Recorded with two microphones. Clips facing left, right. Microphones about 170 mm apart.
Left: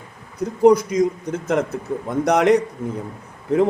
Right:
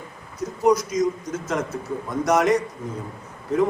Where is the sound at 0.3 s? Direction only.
55° left (ahead or behind).